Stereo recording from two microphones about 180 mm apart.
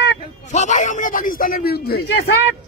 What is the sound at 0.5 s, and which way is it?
Speech, 40° left (ahead or behind).